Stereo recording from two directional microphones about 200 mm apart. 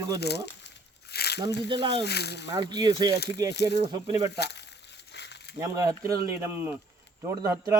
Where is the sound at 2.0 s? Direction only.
55° left (ahead or behind).